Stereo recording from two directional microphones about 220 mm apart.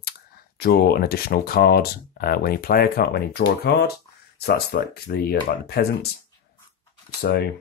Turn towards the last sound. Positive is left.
turn(degrees=45)  # may be behind; listen again after turning